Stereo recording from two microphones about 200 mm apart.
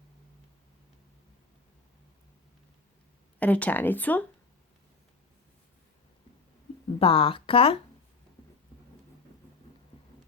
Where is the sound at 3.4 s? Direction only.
5° left (ahead or behind).